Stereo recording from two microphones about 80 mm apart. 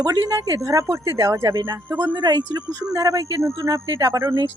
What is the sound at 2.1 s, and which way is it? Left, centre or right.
Speech, right.